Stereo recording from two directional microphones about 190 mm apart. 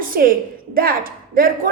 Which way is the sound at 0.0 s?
50° right (ahead or behind).